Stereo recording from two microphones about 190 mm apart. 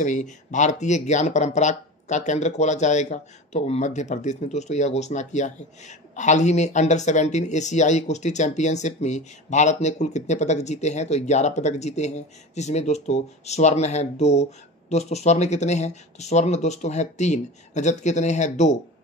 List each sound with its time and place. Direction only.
0.0 s speech: 40° left (ahead or behind)